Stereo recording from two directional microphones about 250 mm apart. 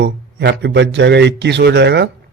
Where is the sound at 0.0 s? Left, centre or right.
Right.